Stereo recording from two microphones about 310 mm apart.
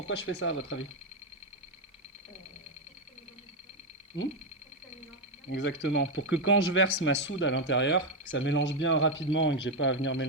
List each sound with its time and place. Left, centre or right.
0.1 s speech: left
5.5 s speech: left